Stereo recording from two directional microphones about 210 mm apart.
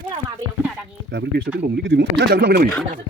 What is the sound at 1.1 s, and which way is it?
Speech, 55° right (ahead or behind).